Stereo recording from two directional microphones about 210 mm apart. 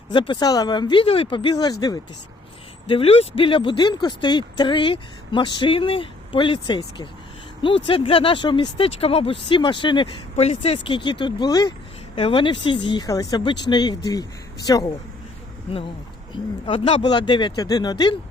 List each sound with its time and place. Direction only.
0.1 s speech: 20° left (ahead or behind)
2.9 s speech: 25° left (ahead or behind)
16.6 s speech: 25° left (ahead or behind)